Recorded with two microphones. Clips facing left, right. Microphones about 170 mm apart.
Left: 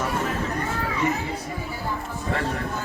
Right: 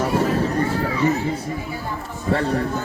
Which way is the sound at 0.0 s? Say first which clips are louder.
Right 7 dB; 30° right (ahead or behind).